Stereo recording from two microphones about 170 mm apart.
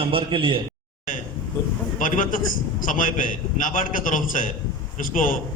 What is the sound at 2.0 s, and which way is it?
Speech, 50° left (ahead or behind).